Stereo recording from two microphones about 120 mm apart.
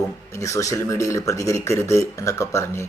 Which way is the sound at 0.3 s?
25° left (ahead or behind).